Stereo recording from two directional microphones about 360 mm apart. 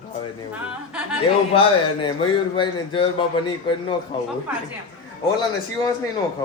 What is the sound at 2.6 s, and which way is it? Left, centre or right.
A man's voice, centre.